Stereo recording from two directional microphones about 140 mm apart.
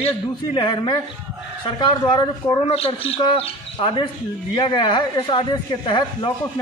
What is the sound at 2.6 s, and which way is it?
Speech, 45° left (ahead or behind).